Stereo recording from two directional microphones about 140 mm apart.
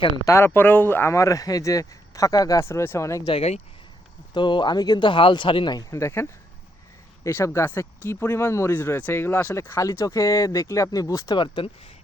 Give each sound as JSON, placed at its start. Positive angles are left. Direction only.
{"t": 0.3, "sound": "speech", "side_deg": 20}
{"t": 3.2, "sound": "speech", "side_deg": 45}
{"t": 4.4, "sound": "speech", "side_deg": 35}